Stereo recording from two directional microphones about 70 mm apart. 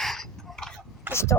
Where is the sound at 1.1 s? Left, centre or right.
Right.